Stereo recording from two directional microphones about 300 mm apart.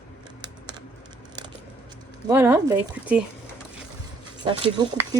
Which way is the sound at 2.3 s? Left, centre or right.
Centre.